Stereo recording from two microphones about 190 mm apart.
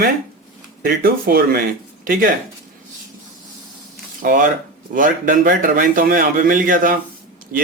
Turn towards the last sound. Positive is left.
turn(degrees=-50)  # may be behind; listen again after turning